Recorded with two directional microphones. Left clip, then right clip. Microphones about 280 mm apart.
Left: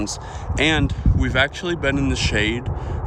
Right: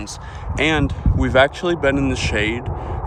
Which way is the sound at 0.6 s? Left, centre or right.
Centre.